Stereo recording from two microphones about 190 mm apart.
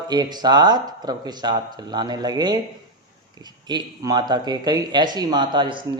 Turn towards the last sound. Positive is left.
turn(degrees=-25)  # may be behind; listen again after turning